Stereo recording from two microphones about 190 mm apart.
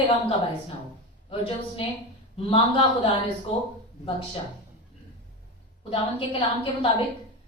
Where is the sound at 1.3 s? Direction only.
30° left (ahead or behind).